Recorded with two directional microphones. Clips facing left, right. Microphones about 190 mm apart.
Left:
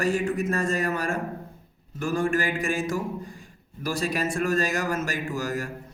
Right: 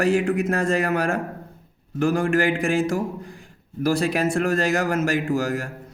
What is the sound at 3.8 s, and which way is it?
A man's voice, 65° right (ahead or behind).